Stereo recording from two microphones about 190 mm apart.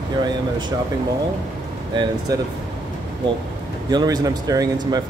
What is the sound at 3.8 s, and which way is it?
Speech, 20° right (ahead or behind).